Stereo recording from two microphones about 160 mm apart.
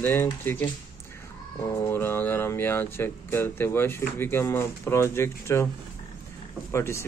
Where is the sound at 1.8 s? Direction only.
15° left (ahead or behind).